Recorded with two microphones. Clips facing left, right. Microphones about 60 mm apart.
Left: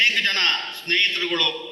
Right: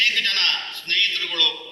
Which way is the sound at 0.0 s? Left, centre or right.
Left.